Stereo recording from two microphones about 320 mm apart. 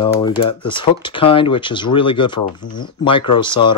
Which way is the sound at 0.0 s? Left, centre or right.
Centre.